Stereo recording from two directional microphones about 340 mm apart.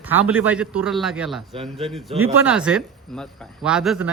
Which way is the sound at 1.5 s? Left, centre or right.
Centre.